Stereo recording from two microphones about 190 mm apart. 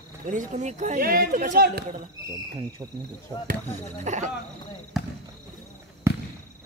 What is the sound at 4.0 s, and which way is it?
Speech, 40° right (ahead or behind).